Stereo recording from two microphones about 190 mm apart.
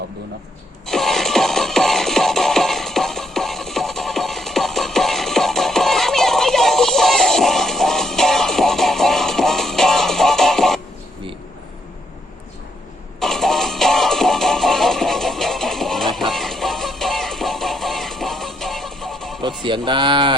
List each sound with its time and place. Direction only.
0.9 s music: centre (ahead or behind)
13.1 s music: centre (ahead or behind)
19.6 s speech: 25° right (ahead or behind)